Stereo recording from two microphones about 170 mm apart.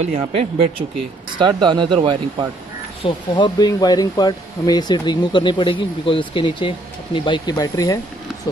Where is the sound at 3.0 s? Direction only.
30° left (ahead or behind).